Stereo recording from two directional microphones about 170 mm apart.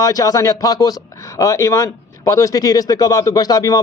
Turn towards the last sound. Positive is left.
turn(degrees=20)  # may be behind; listen again after turning